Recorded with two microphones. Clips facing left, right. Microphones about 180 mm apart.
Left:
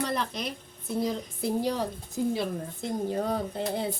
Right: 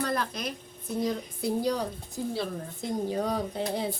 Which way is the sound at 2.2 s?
20° left (ahead or behind).